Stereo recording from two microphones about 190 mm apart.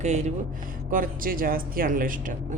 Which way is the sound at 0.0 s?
35° right (ahead or behind).